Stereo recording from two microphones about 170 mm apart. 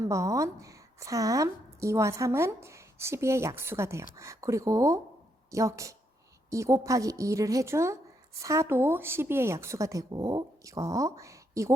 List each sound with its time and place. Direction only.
0.0 s a woman's voice: 20° right (ahead or behind)